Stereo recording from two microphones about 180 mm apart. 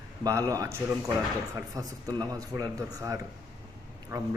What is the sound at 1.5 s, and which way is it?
Speech, 20° right (ahead or behind).